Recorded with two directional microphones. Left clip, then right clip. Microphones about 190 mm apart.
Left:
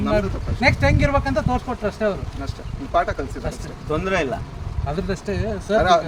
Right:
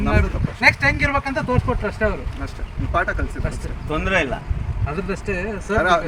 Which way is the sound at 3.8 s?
10° right (ahead or behind).